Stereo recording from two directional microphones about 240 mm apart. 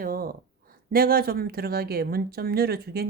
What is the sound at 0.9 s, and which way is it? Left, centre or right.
Speech, right.